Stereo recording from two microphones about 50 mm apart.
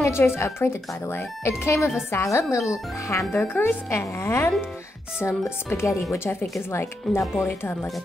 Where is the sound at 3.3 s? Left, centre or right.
Left.